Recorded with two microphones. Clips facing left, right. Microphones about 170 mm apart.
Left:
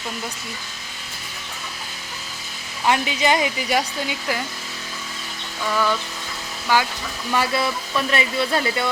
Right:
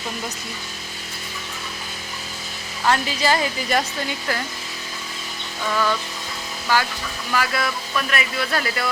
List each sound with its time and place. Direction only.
2.8 s speech: 15° left (ahead or behind)
5.6 s speech: 5° left (ahead or behind)
7.3 s speech: 25° left (ahead or behind)